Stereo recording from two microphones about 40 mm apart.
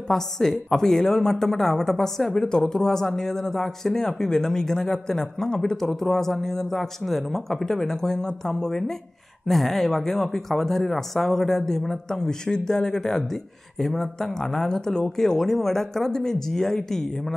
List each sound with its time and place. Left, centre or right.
0.1 s a woman's voice: centre
9.5 s a woman's voice: centre